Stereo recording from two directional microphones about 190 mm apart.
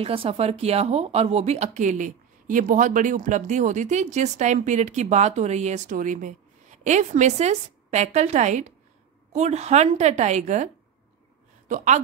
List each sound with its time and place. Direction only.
0.0 s speech: 30° right (ahead or behind)